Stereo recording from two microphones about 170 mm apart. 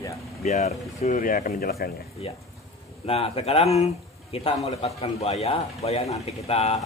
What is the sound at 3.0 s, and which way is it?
Speech, 35° left (ahead or behind).